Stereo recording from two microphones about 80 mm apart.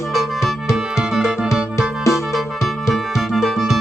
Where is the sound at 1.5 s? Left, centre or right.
Left.